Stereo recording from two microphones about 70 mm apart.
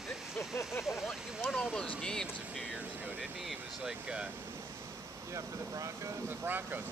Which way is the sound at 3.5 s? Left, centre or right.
Centre.